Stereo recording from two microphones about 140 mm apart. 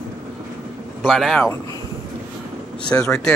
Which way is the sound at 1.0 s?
5° left (ahead or behind).